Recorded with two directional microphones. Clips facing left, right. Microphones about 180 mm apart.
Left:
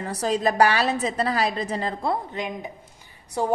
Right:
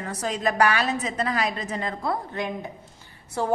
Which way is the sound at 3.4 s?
15° left (ahead or behind).